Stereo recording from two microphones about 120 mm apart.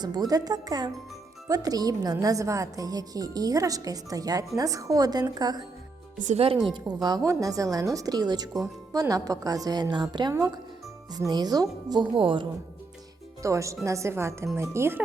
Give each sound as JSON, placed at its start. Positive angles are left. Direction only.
{"t": 0.0, "sound": "a woman's voice", "side_deg": -35}
{"t": 6.1, "sound": "speech", "side_deg": -90}
{"t": 6.7, "sound": "a woman's voice", "side_deg": -35}
{"t": 13.4, "sound": "speech", "side_deg": -25}